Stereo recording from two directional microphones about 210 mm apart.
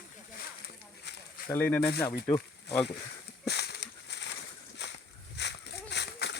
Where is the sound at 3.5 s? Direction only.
50° left (ahead or behind).